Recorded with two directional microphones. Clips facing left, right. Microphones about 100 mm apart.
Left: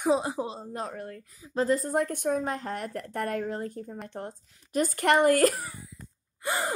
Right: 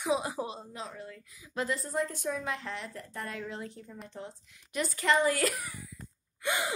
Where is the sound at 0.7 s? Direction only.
55° left (ahead or behind).